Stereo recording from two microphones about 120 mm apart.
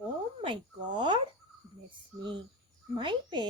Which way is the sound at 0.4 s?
40° right (ahead or behind).